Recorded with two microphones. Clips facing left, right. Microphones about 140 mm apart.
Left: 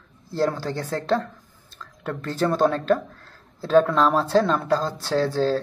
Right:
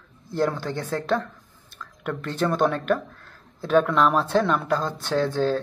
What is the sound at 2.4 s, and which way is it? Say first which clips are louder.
Speech: left 2 dB; 30° left (ahead or behind).